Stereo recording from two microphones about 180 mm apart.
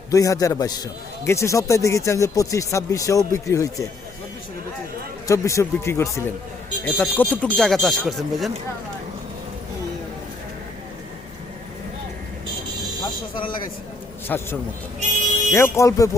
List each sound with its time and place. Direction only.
0.1 s a man's voice: 20° left (ahead or behind)
5.3 s speech: 15° left (ahead or behind); by 8.4 s centre (ahead or behind)
13.0 s a sound: 25° left (ahead or behind)
14.3 s speech: 10° left (ahead or behind)
15.5 s speech: 15° left (ahead or behind)